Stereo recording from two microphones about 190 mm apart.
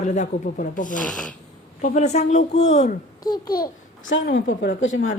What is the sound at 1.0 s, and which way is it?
Speech, 5° left (ahead or behind).